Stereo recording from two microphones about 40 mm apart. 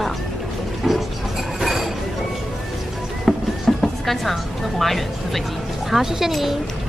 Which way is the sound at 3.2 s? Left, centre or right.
Centre.